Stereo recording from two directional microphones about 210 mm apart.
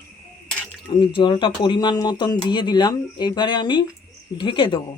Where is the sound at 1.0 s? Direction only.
20° left (ahead or behind).